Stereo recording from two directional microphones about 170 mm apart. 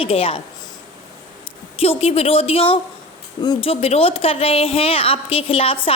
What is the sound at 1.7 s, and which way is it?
A woman's voice, 35° left (ahead or behind).